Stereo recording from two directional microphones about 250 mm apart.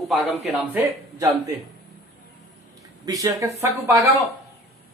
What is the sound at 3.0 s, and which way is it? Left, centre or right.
A man's voice, centre.